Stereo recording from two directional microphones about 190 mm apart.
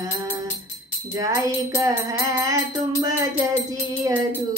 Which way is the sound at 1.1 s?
15° right (ahead or behind).